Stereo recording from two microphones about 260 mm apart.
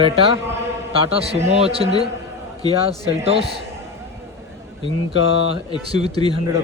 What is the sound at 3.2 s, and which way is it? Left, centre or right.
Speech, right.